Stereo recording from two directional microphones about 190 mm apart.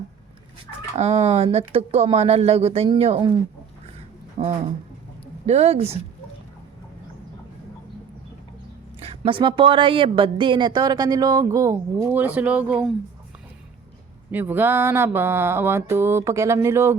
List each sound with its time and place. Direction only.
0.9 s speech: 35° right (ahead or behind)
4.4 s speech: 40° right (ahead or behind)
9.0 s speech: 30° right (ahead or behind); by 12.9 s 5° right (ahead or behind)
14.3 s mantra: 10° right (ahead or behind)